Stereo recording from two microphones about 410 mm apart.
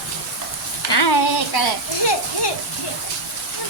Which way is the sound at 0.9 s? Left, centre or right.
Left.